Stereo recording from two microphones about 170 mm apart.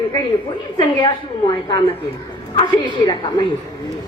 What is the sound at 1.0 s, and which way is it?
A woman's voice, 25° left (ahead or behind).